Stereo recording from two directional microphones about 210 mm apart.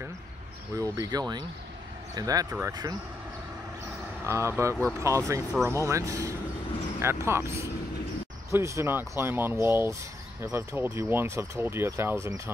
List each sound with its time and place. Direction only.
0.7 s speech: 15° right (ahead or behind)
4.3 s speech: 15° right (ahead or behind)